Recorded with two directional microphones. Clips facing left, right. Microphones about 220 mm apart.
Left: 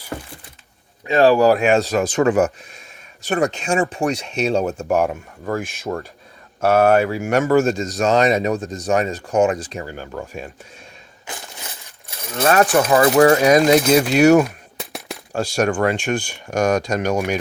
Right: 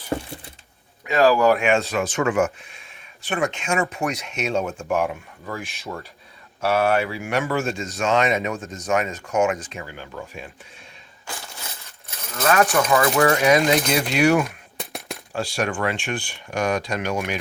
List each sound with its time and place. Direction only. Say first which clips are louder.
1.0 s a man's voice: left 3 dB; 30° left (ahead or behind); by 10.5 s 45° left (ahead or behind)
12.3 s speech: left 4 dB; 35° left (ahead or behind)
13.4 s speech: left 5 dB; 40° left (ahead or behind)
14.4 s a sound: left 3 dB; centre (ahead or behind)
15.3 s speech: left 6 dB; 45° left (ahead or behind)